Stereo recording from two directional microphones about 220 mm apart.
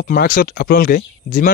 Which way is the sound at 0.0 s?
40° left (ahead or behind).